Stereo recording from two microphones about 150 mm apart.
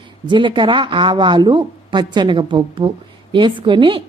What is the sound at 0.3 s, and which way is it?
A woman's voice, 30° right (ahead or behind).